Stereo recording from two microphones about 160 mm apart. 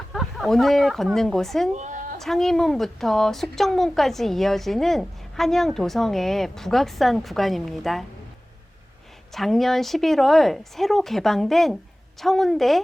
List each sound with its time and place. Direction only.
0.1 s speech: centre (ahead or behind)
1.7 s a sound: 50° right (ahead or behind)
2.2 s a woman's voice: centre (ahead or behind)
9.3 s a woman's voice: centre (ahead or behind)